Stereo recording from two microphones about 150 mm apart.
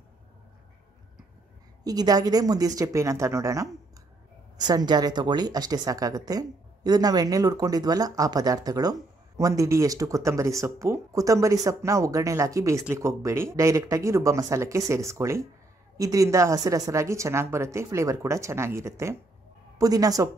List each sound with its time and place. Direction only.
1.9 s speech: 25° right (ahead or behind)